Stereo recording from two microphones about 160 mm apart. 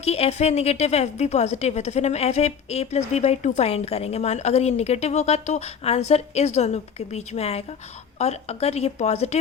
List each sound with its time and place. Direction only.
0.0 s a woman's voice: 40° left (ahead or behind)